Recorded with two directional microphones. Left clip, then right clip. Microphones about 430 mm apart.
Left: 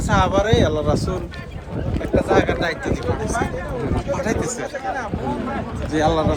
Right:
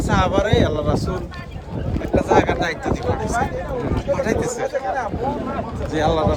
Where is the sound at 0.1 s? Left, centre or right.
Centre.